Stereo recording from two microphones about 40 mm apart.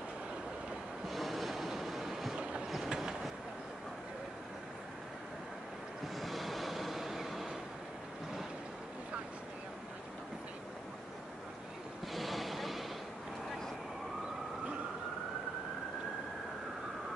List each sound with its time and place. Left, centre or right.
1.0 s train: centre
2.3 s train: right
6.1 s train: centre
12.1 s vehicle: centre